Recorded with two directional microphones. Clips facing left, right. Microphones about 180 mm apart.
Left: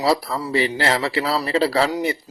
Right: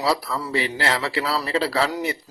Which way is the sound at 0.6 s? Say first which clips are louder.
Left 6 dB; 30° left (ahead or behind).